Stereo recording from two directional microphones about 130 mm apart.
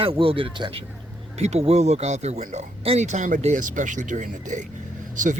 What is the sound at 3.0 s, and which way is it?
Speech, 75° right (ahead or behind).